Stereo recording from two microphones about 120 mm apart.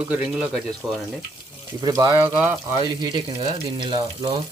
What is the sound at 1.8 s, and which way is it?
Speech, 35° right (ahead or behind).